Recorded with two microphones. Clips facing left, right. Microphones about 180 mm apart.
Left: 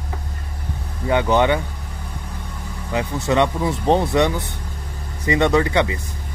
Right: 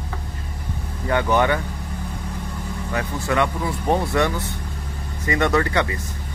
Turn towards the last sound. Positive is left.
turn(degrees=15)  # may be behind; listen again after turning